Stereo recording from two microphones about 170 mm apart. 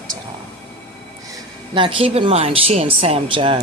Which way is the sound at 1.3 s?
30° right (ahead or behind).